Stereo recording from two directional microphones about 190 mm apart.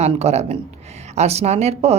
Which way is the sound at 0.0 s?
35° right (ahead or behind).